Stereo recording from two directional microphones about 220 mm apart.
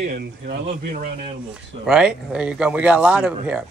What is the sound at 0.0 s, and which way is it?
Speech, 40° right (ahead or behind).